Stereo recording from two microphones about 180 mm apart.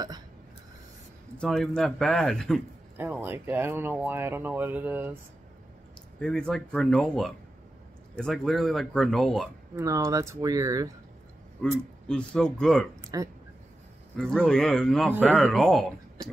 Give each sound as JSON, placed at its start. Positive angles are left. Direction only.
{"t": 1.4, "sound": "speech", "side_deg": 0}
{"t": 3.0, "sound": "speech", "side_deg": -10}
{"t": 6.1, "sound": "speech", "side_deg": 5}
{"t": 9.8, "sound": "speech", "side_deg": -15}
{"t": 12.1, "sound": "speech", "side_deg": 5}
{"t": 13.0, "sound": "speech", "side_deg": -20}
{"t": 14.1, "sound": "speech", "side_deg": 5}